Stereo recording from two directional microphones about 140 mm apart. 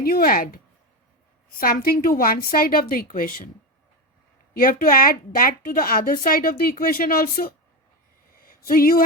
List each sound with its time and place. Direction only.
0.0 s a woman's voice: 90° left
4.5 s a woman's voice: 90° left
8.4 s a sound: 90° left